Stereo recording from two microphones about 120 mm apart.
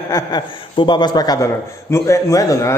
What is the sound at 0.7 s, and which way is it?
A man's voice, 40° left (ahead or behind).